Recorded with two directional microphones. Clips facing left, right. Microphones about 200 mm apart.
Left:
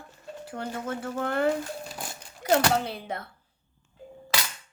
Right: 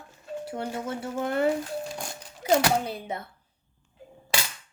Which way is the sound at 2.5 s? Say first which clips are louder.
Even; 15° right (ahead or behind).